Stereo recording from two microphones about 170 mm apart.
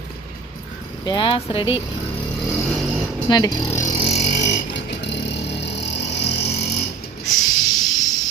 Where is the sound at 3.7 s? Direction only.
40° left (ahead or behind).